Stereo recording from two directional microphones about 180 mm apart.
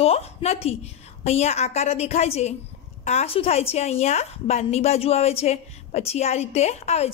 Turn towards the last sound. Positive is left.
turn(degrees=35)  # may be behind; listen again after turning